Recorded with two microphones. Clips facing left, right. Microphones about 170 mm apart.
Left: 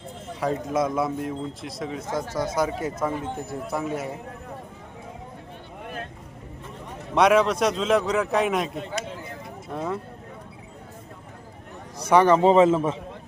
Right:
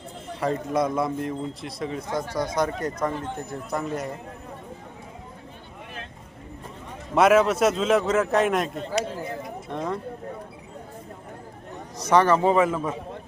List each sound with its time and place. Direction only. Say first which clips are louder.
0.3 s a man's voice: even; centre (ahead or behind)
7.1 s a man's voice: right 1 dB; 5° right (ahead or behind)
11.9 s a man's voice: left 2 dB; 10° left (ahead or behind)